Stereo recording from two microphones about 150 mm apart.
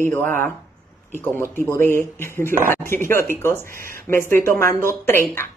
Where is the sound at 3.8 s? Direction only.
70° right (ahead or behind).